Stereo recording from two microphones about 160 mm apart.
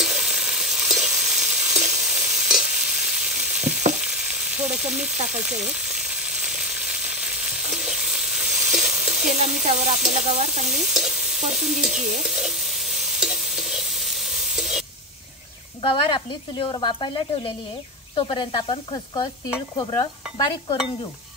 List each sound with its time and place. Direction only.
0.0 s stir: centre (ahead or behind)
3.5 s frying: 5° right (ahead or behind)
7.7 s stir: centre (ahead or behind)
9.4 s frying: 50° right (ahead or behind)
10.7 s stir: centre (ahead or behind)
15.8 s speech: 30° left (ahead or behind)